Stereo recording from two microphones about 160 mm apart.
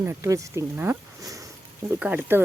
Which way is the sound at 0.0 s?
15° right (ahead or behind).